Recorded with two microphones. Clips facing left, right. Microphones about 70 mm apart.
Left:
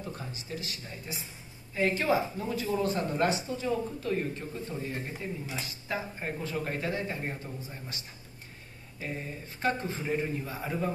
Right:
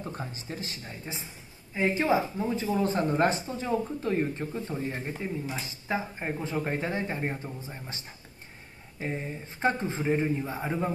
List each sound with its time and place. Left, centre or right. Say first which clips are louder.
0.1 s speech: right 2 dB; right
9.0 s speech: right 4 dB; right